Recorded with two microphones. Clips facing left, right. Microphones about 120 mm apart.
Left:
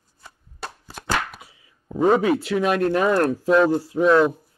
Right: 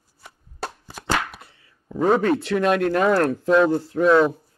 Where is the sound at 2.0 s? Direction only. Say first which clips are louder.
Left 1 dB; 5° left (ahead or behind).